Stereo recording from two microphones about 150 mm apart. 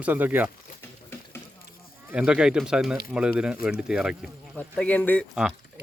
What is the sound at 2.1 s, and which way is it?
Speech, 5° right (ahead or behind).